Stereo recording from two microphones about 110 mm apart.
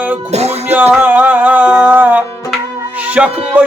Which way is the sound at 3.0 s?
15° right (ahead or behind).